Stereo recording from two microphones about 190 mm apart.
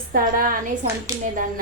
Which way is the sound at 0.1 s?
50° right (ahead or behind).